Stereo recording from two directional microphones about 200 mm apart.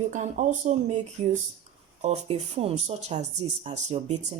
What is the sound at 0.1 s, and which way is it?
Speech, 40° right (ahead or behind).